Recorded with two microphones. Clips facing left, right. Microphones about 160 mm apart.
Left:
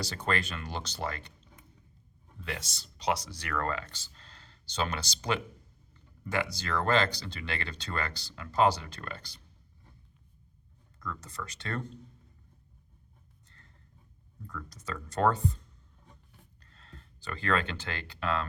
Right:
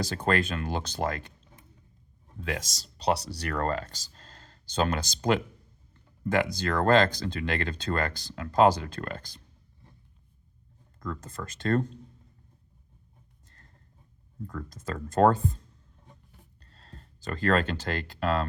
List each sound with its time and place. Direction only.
0.0 s speech: 50° right (ahead or behind)
2.4 s speech: 45° right (ahead or behind)
2.8 s speech: 35° right (ahead or behind); by 5.3 s 50° right (ahead or behind)
6.6 s speech: 50° right (ahead or behind)
11.0 s speech: 50° right (ahead or behind)
14.3 s speech: 45° right (ahead or behind)
16.6 s a sound: 35° right (ahead or behind)
17.9 s speech: 40° right (ahead or behind)